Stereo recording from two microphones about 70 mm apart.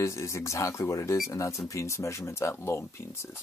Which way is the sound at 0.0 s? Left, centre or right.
Left.